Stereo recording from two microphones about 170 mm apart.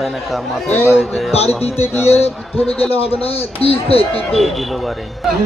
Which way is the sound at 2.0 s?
35° left (ahead or behind).